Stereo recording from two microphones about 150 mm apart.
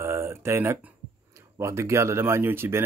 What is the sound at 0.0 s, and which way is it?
Speech, 15° right (ahead or behind).